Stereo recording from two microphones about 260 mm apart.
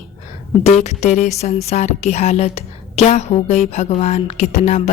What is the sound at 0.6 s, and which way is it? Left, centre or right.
A woman's voice, left.